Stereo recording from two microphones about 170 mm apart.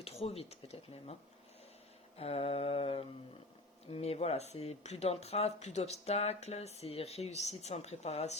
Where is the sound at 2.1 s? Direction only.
35° left (ahead or behind).